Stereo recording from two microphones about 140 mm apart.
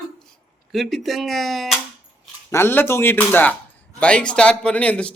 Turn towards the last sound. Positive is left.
turn(degrees=10)  # may be behind; listen again after turning